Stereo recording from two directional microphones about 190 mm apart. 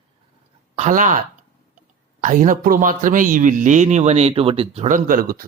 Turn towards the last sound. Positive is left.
turn(degrees=-45)  # may be behind; listen again after turning